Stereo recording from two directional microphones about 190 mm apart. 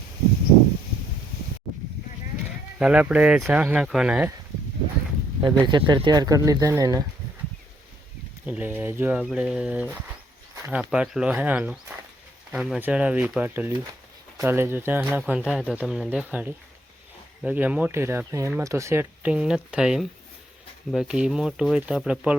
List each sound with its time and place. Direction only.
2.7 s speech: 5° right (ahead or behind)
5.6 s speech: 25° right (ahead or behind)
8.4 s speech: 10° right (ahead or behind)